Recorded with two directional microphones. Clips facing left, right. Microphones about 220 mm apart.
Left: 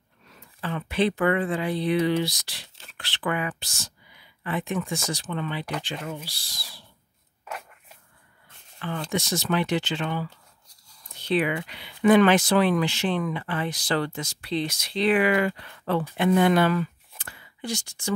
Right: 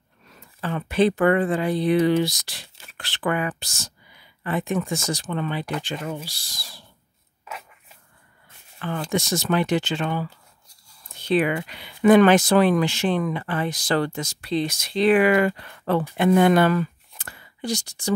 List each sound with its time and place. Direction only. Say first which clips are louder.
0.6 s speech: right 4 dB; 45° right (ahead or behind)
8.8 s speech: right 3 dB; 45° right (ahead or behind)
17.2 s whispering: right 4 dB; 45° right (ahead or behind)